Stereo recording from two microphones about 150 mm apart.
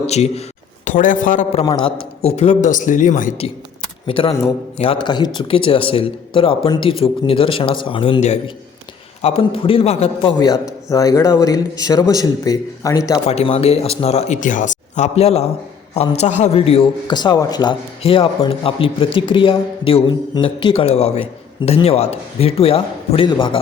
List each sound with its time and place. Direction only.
0.1 s speech: 45° left (ahead or behind)
0.9 s speech: 60° left (ahead or behind)
1.6 s speech: 30° left (ahead or behind)
2.2 s speech: 45° left (ahead or behind)
4.0 s a man's voice: 35° left (ahead or behind)
13.2 s a man's voice: 45° left (ahead or behind)